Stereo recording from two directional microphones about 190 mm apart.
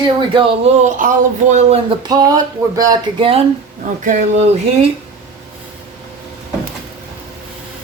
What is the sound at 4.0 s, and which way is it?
Speech, 40° right (ahead or behind).